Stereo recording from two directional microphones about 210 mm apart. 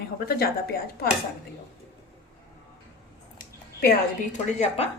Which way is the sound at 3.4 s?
45° left (ahead or behind).